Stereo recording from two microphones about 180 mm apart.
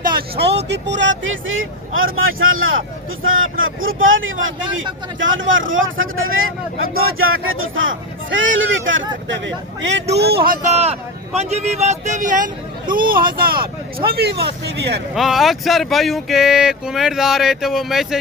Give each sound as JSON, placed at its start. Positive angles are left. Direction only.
{"t": 0.0, "sound": "vehicle", "side_deg": -55}
{"t": 0.7, "sound": "speech", "side_deg": -80}
{"t": 10.2, "sound": "a man's voice", "side_deg": -60}
{"t": 15.1, "sound": "speech", "side_deg": 0}